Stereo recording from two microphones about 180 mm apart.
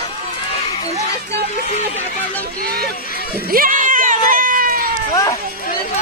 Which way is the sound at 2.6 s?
60° right (ahead or behind).